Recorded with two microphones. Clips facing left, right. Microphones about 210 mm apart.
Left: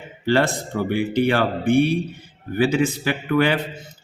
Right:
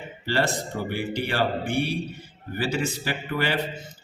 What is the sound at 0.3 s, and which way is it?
Speech, 55° left (ahead or behind).